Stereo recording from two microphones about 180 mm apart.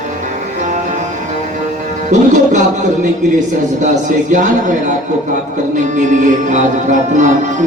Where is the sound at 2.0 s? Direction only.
45° right (ahead or behind).